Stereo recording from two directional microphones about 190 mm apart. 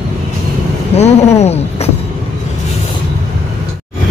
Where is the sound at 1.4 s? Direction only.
35° left (ahead or behind).